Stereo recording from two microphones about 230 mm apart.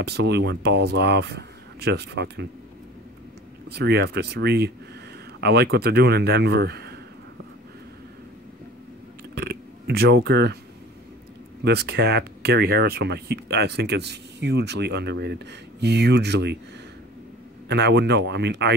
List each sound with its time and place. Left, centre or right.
0.0 s speech: right
3.7 s speech: right
9.3 s a sound: right
11.6 s speech: right
17.6 s speech: right